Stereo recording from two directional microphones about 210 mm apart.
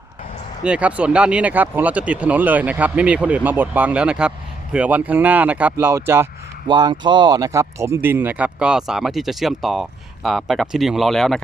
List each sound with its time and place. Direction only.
0.6 s speech: 5° right (ahead or behind)